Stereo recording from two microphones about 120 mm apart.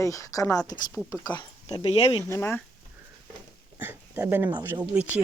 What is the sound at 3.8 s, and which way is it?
Speech, 15° right (ahead or behind).